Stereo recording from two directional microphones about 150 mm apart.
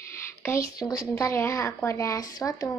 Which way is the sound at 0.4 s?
20° left (ahead or behind).